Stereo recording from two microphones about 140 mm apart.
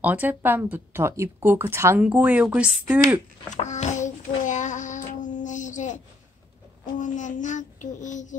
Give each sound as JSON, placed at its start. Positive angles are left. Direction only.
{"t": 0.0, "sound": "speech", "side_deg": -10}
{"t": 3.6, "sound": "a child's voice", "side_deg": 60}
{"t": 4.4, "sound": "child singing", "side_deg": 60}
{"t": 7.0, "sound": "child singing", "side_deg": 65}